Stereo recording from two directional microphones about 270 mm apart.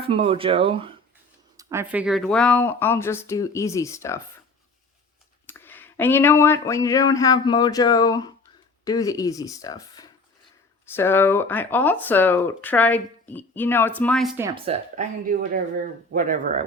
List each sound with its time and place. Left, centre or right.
0.1 s speech: right
1.5 s speech: centre
5.5 s speech: centre
14.3 s speech: centre
14.7 s speech: right